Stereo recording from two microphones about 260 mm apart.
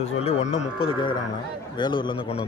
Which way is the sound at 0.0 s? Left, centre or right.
Left.